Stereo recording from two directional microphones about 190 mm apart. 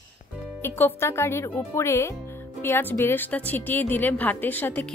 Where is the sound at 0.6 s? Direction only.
10° left (ahead or behind).